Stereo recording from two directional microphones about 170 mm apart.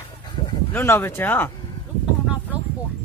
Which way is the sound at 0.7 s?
10° left (ahead or behind).